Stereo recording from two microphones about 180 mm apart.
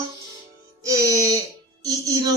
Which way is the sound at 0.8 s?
15° right (ahead or behind).